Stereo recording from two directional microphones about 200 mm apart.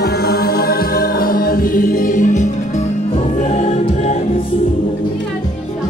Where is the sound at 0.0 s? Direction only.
55° left (ahead or behind); by 4.5 s 30° left (ahead or behind).